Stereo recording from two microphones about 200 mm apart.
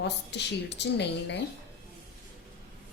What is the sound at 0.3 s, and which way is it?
Speech, 60° left (ahead or behind).